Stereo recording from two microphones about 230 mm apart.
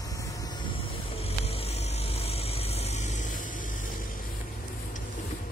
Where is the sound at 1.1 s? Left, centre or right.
Left.